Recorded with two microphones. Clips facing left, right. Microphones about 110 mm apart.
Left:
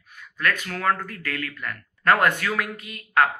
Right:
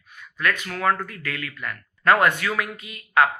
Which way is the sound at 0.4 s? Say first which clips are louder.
Right 1 dB; 50° left (ahead or behind).